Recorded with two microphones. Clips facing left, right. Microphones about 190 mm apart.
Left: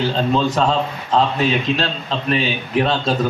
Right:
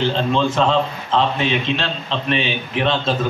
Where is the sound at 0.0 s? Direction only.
40° left (ahead or behind).